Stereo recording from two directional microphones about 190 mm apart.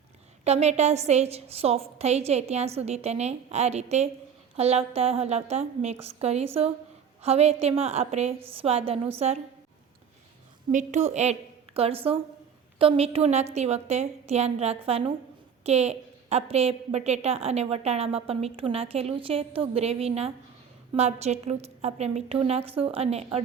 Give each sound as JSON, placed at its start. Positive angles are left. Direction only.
{"t": 0.4, "sound": "a woman's voice", "side_deg": -35}
{"t": 10.7, "sound": "a woman's voice", "side_deg": -40}